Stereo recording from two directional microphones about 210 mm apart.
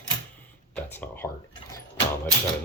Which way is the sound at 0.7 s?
10° left (ahead or behind).